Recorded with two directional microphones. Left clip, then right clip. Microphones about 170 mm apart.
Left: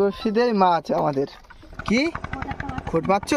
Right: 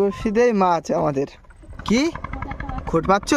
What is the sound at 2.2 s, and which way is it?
Machine gun, 70° left (ahead or behind).